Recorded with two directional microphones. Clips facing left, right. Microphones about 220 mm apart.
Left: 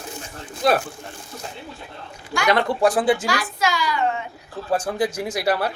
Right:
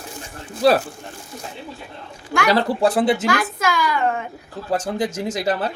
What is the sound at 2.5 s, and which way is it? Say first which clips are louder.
Speech: even; 25° right (ahead or behind).